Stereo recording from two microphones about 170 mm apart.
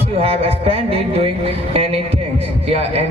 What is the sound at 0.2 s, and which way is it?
Speech, 35° right (ahead or behind).